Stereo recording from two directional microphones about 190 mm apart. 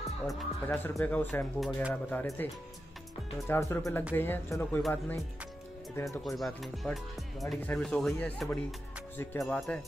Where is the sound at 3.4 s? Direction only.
15° left (ahead or behind).